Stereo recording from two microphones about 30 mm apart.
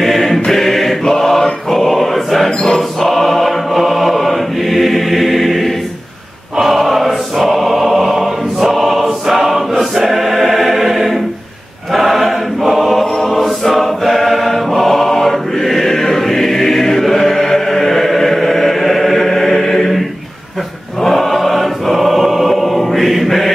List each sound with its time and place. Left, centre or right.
0.0 s choir: centre
21.0 s choir: centre